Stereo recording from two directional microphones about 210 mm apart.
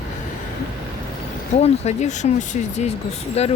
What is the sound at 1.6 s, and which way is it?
Speech, 30° left (ahead or behind).